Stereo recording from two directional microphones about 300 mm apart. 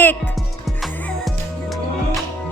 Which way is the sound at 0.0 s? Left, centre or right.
Centre.